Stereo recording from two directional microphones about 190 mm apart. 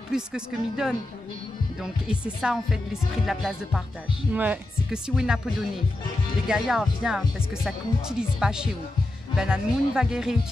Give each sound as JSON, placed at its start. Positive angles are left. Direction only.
{"t": 0.1, "sound": "music", "side_deg": -5}